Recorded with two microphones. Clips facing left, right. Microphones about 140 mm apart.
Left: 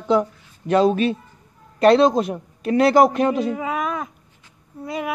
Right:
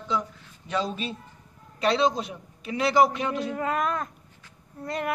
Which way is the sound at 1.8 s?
50° left (ahead or behind).